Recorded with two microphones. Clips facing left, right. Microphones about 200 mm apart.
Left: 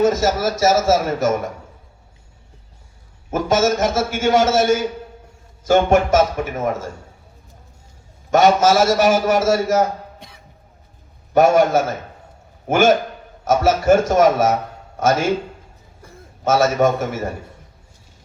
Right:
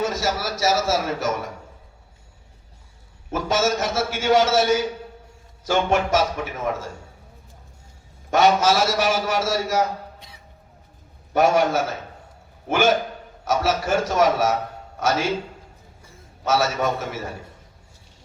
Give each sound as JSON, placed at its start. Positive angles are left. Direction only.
{"t": 0.0, "sound": "a man's voice", "side_deg": 45}
{"t": 3.3, "sound": "a man's voice", "side_deg": 45}
{"t": 8.3, "sound": "a man's voice", "side_deg": 45}
{"t": 16.4, "sound": "a man's voice", "side_deg": 50}